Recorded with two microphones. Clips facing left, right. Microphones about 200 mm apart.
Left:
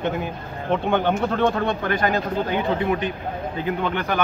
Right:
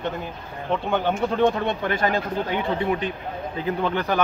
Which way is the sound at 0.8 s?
5° right (ahead or behind).